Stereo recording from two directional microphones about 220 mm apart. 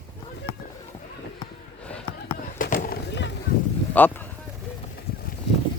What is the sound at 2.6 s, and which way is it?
Skateboard, 40° left (ahead or behind).